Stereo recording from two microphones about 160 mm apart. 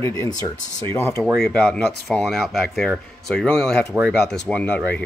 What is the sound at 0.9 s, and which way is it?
Speech, 15° left (ahead or behind).